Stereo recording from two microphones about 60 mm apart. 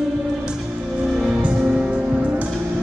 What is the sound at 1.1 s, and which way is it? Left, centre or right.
Music, centre.